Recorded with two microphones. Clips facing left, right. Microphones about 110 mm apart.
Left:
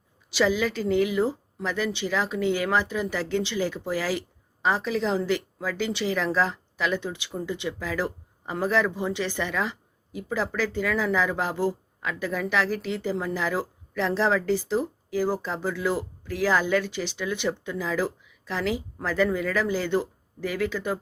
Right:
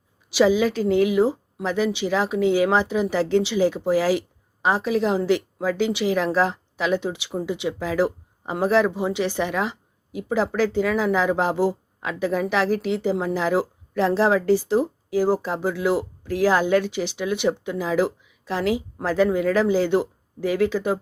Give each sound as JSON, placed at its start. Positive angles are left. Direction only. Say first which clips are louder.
{"t": 0.3, "sound": "speech", "louder": "right 6 dB", "side_deg": -15}